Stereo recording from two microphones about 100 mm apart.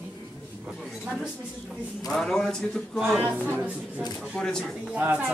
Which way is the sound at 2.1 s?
5° left (ahead or behind).